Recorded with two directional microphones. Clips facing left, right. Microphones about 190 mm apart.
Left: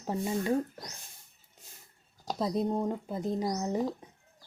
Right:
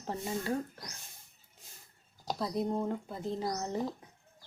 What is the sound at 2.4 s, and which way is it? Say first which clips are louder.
Speech: left 3 dB; 20° left (ahead or behind).